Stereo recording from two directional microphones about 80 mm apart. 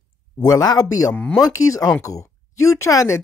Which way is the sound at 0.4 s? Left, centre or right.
Left.